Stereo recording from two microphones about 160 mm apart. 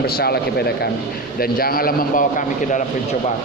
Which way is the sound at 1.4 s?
70° left (ahead or behind).